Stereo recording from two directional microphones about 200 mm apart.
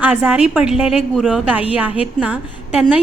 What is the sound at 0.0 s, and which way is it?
A woman's voice, 5° right (ahead or behind).